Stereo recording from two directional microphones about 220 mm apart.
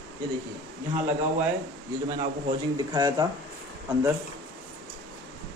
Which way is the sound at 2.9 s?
15° right (ahead or behind).